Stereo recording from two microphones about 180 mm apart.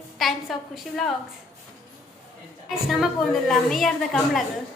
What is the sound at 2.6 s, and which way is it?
A woman's voice, centre (ahead or behind).